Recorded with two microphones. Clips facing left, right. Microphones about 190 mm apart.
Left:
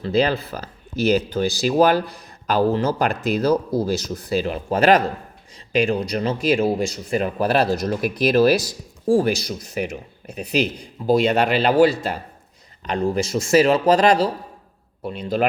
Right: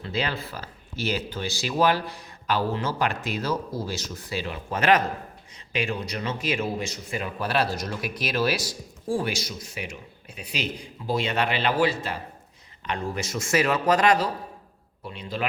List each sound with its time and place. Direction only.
0.0 s speech: 35° left (ahead or behind)
11.0 s speech: 40° left (ahead or behind)